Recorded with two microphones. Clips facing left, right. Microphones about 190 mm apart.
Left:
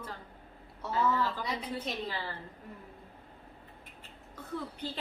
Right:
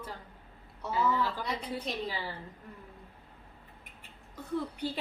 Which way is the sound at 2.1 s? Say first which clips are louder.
Right 1 dB; 10° right (ahead or behind).